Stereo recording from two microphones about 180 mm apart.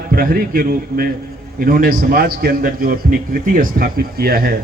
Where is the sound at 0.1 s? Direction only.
55° right (ahead or behind).